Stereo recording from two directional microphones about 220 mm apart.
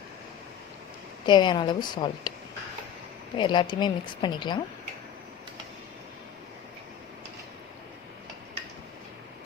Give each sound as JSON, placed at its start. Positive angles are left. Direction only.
{"t": 1.3, "sound": "a woman's voice", "side_deg": 20}
{"t": 3.3, "sound": "a woman's voice", "side_deg": 20}